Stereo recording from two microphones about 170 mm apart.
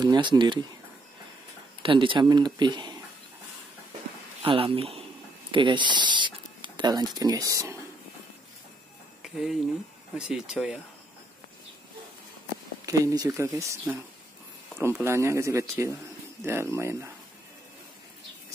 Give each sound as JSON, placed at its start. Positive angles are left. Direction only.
{"t": 0.0, "sound": "speech", "side_deg": -25}
{"t": 1.8, "sound": "speech", "side_deg": -30}
{"t": 4.5, "sound": "speech", "side_deg": -30}
{"t": 9.2, "sound": "a sound", "side_deg": 0}
{"t": 10.1, "sound": "speech", "side_deg": -5}
{"t": 12.8, "sound": "speech", "side_deg": -20}